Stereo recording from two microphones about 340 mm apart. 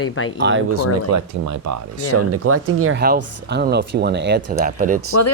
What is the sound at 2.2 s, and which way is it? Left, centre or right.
Speech, right.